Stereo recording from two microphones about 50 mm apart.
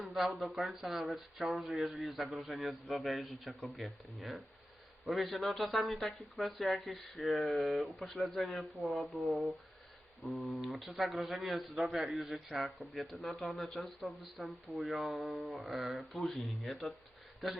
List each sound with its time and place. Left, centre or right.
0.0 s speech: centre
16.1 s speech: centre